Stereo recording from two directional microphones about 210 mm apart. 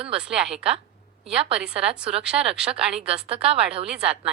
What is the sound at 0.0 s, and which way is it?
A woman's voice, 5° right (ahead or behind).